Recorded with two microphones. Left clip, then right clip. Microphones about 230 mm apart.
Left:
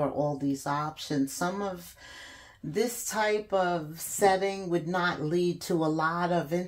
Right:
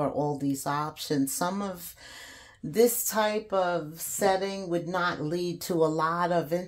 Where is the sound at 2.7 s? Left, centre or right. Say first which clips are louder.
Right 6 dB; right.